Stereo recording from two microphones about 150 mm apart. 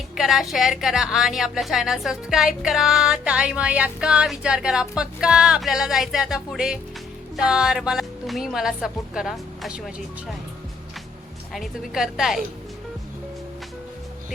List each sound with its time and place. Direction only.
0.2 s a woman's voice: centre (ahead or behind)
11.5 s a woman's voice: centre (ahead or behind)